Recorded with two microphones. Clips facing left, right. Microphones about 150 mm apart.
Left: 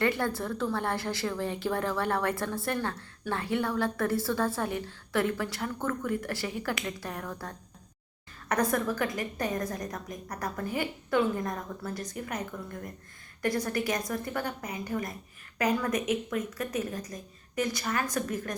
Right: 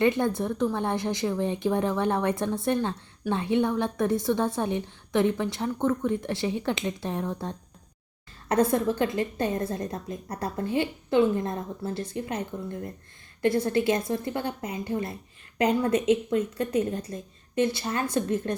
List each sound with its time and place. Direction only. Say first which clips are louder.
0.0 s a woman's voice: right 5 dB; 20° right (ahead or behind)